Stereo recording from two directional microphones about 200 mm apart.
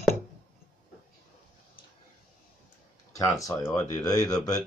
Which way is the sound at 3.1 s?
15° left (ahead or behind).